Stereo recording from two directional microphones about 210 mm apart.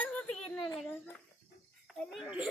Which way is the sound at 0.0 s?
5° left (ahead or behind).